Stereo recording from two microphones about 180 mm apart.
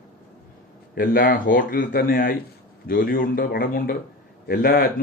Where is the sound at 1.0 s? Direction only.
55° left (ahead or behind).